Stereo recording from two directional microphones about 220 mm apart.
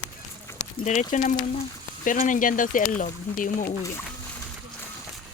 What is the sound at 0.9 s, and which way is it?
Speech, 35° left (ahead or behind).